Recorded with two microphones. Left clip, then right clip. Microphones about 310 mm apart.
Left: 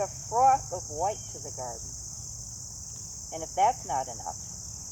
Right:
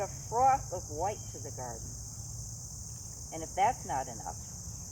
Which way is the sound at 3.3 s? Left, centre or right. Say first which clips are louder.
Left 4 dB; centre.